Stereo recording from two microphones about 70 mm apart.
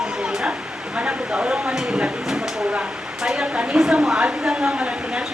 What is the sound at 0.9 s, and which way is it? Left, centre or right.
A woman's voice, centre.